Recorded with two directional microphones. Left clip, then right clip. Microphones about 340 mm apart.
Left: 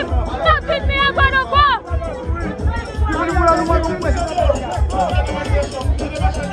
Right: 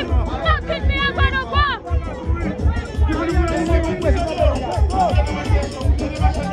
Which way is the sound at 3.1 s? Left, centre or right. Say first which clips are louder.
Left 7 dB; centre.